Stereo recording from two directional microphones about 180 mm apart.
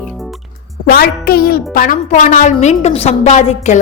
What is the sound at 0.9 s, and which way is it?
A woman's voice, 55° left (ahead or behind).